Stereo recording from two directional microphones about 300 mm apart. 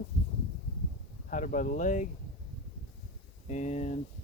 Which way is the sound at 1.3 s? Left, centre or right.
Left.